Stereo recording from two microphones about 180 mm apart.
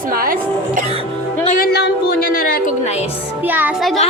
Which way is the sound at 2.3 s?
50° left (ahead or behind).